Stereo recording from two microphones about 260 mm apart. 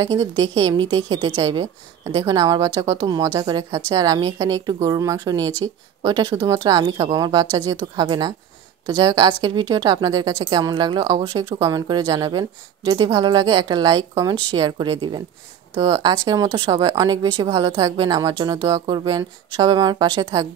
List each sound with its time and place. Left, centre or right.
0.0 s a woman's voice: centre